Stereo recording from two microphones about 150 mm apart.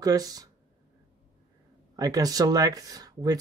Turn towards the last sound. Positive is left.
turn(degrees=-25)  # may be behind; listen again after turning